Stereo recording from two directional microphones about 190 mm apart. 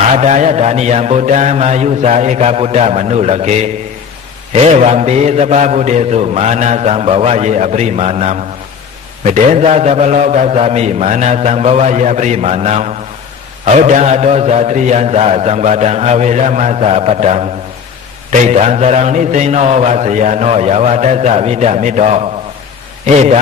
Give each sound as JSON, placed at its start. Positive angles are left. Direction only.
{"t": 0.2, "sound": "mantra", "side_deg": -40}